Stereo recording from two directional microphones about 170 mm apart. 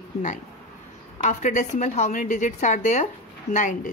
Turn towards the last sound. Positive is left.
turn(degrees=50)  # may be behind; listen again after turning